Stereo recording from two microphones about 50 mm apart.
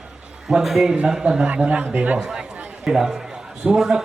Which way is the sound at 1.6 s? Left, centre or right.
Right.